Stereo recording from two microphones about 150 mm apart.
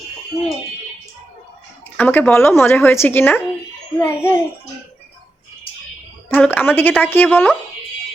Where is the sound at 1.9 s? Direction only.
10° left (ahead or behind).